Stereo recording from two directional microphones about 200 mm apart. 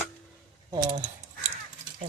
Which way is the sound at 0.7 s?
20° right (ahead or behind).